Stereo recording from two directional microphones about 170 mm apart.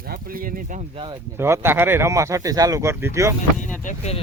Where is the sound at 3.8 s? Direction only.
40° left (ahead or behind).